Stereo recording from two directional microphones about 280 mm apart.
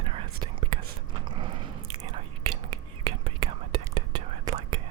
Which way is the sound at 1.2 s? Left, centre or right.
Centre.